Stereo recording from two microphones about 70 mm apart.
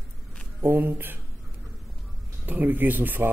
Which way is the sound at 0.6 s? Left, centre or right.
Right.